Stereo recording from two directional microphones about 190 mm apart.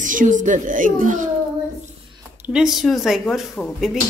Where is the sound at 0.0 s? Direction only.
45° right (ahead or behind).